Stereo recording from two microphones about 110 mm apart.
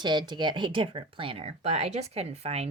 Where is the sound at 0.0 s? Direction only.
45° right (ahead or behind).